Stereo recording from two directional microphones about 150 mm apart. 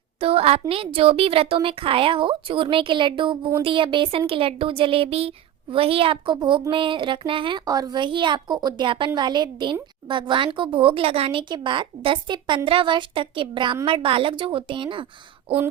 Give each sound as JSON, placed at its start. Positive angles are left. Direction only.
{"t": 0.2, "sound": "speech", "side_deg": -40}